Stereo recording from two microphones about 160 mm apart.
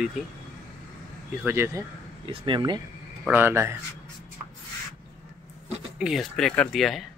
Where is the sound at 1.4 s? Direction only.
15° right (ahead or behind).